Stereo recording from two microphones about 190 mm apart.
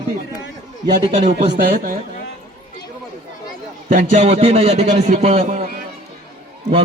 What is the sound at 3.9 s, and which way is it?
A man's voice, 40° right (ahead or behind).